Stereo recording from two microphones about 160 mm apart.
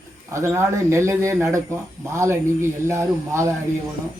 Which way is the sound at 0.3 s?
15° right (ahead or behind).